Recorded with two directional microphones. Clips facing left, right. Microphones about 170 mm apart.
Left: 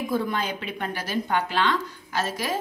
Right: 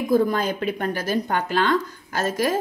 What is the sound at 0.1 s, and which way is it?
Speech, 45° right (ahead or behind).